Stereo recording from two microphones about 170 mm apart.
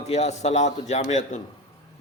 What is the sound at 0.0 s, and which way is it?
A man's voice, 40° left (ahead or behind).